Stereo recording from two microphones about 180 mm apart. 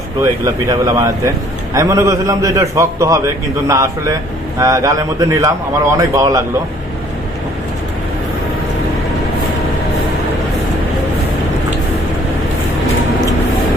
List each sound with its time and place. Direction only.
0.2 s a man's voice: 20° right (ahead or behind)